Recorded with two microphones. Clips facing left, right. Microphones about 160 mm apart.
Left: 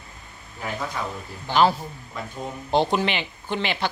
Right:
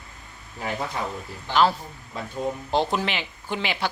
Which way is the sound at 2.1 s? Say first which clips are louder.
Right 1 dB; 30° right (ahead or behind).